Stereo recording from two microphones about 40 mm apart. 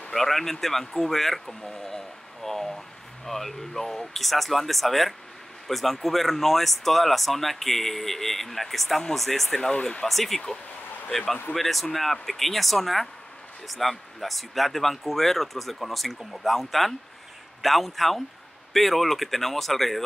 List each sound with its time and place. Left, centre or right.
0.1 s speech: centre
9.6 s speech: left
10.0 s speech: centre